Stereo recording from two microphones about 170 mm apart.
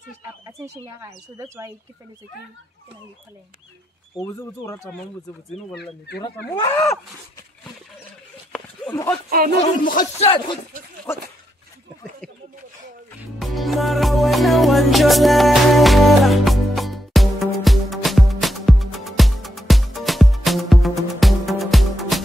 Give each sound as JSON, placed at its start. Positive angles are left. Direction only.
{"t": 0.5, "sound": "speech", "side_deg": -20}
{"t": 4.2, "sound": "speech", "side_deg": 20}
{"t": 5.8, "sound": "speech", "side_deg": 80}
{"t": 6.5, "sound": "speech", "side_deg": 20}
{"t": 8.5, "sound": "a sound", "side_deg": 5}
{"t": 9.6, "sound": "speech", "side_deg": 50}
{"t": 10.2, "sound": "speech", "side_deg": 30}
{"t": 11.1, "sound": "dog", "side_deg": 15}
{"t": 13.4, "sound": "music", "side_deg": 0}